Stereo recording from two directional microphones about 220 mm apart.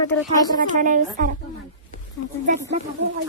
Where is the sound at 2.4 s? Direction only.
35° right (ahead or behind).